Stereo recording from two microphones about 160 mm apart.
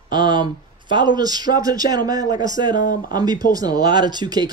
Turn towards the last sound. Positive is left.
turn(degrees=-25)  # may be behind; listen again after turning